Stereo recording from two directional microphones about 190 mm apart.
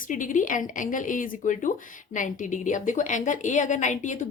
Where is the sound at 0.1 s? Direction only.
45° left (ahead or behind).